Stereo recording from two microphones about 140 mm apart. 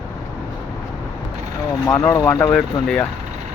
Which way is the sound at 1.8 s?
20° left (ahead or behind).